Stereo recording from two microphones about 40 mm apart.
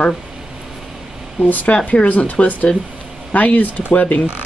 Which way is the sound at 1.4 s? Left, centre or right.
Left.